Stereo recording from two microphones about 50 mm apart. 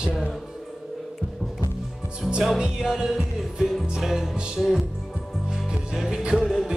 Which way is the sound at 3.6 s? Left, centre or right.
Centre.